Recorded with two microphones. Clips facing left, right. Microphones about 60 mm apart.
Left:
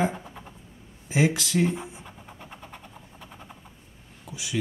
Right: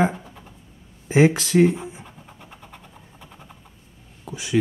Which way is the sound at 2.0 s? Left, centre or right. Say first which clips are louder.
Even; centre.